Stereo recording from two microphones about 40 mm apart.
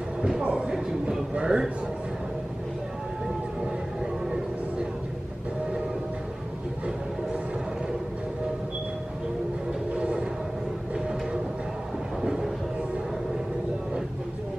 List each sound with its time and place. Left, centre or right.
0.4 s speech: right
9.9 s music: right
12.2 s vehicle: centre